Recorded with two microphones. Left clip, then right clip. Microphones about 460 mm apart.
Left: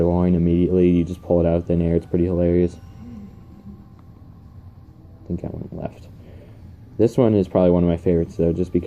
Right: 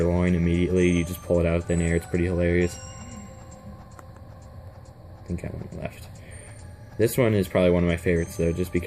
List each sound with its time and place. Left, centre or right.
0.0 s speech: right
7.0 s speech: right